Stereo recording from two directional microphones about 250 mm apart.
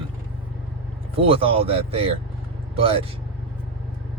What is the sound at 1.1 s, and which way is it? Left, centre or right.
Speech, right.